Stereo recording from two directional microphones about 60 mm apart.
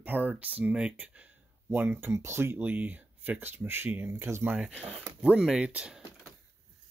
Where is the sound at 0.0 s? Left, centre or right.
Right.